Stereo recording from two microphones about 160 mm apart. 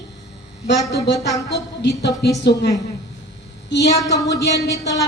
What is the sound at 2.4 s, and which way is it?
Speech, 90° left.